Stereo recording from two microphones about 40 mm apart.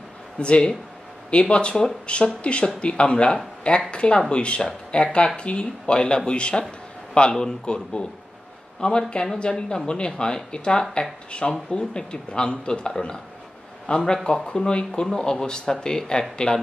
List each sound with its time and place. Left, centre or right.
0.4 s speech: left